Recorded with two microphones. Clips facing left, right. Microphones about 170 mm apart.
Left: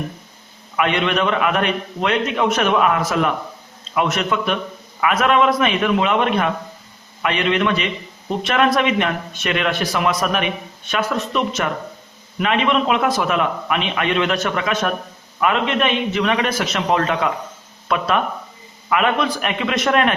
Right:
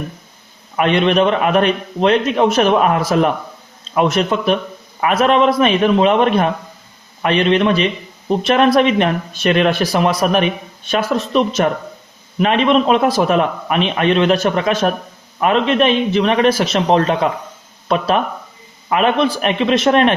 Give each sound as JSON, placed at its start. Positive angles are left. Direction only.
{"t": 0.8, "sound": "speech", "side_deg": -35}